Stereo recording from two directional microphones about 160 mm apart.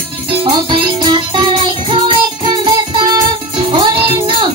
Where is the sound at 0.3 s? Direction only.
30° right (ahead or behind).